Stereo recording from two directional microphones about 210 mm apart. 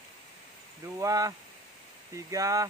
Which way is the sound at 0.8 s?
15° right (ahead or behind).